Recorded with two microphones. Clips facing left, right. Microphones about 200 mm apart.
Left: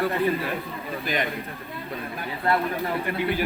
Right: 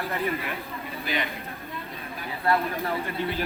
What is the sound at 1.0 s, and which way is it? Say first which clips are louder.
Speech: left 3 dB; 45° left (ahead or behind).